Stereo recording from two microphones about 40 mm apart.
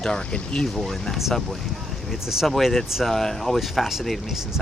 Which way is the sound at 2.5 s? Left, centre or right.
Centre.